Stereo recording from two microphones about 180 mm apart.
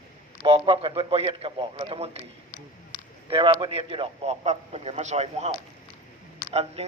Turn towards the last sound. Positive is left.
turn(degrees=-35)  # may be behind; listen again after turning